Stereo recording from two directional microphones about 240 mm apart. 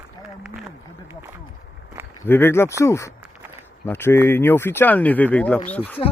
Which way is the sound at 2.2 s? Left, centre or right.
Centre.